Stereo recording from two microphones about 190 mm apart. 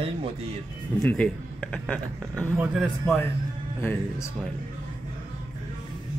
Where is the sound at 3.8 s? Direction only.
10° left (ahead or behind).